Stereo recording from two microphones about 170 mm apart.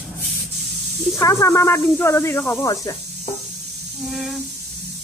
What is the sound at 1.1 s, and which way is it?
Speech, 20° left (ahead or behind).